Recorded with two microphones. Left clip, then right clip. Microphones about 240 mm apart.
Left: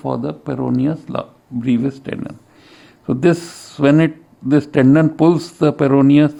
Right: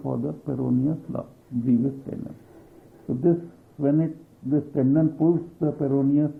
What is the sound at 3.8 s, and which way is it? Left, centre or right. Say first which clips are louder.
Speech: left 11 dB; left.